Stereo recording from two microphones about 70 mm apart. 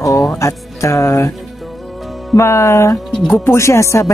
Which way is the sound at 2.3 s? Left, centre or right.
Left.